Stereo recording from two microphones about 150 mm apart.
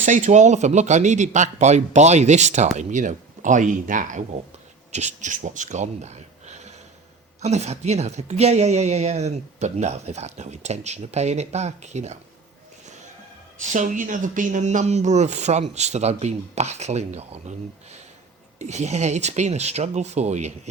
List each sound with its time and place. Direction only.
0.0 s a woman's voice: 55° right (ahead or behind)
13.6 s a woman's voice: 55° right (ahead or behind)
18.6 s a woman's voice: 50° right (ahead or behind)